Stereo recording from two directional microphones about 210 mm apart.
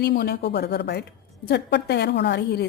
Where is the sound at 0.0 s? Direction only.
50° left (ahead or behind).